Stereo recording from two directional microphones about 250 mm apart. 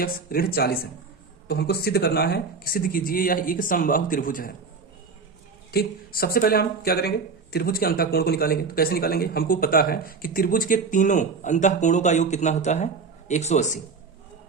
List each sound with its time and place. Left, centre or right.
0.0 s a man's voice: left
5.7 s a man's voice: left